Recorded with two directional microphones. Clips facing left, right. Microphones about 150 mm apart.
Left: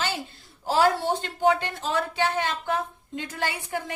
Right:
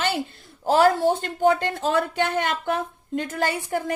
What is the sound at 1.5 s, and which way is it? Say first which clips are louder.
Speech: right 3 dB; 45° right (ahead or behind).